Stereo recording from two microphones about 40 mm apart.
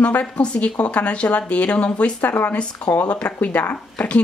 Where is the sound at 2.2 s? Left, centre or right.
Left.